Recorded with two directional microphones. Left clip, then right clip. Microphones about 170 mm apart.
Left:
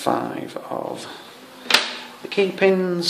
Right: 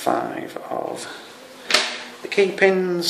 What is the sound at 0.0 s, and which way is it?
Speech, 30° left (ahead or behind).